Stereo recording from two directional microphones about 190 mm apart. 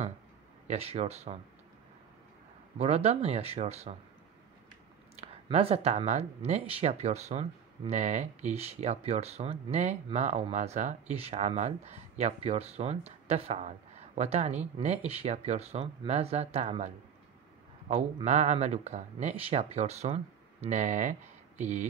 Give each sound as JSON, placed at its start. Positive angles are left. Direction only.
{"t": 0.7, "sound": "speech", "side_deg": -35}
{"t": 2.8, "sound": "speech", "side_deg": -35}
{"t": 5.2, "sound": "speech", "side_deg": -30}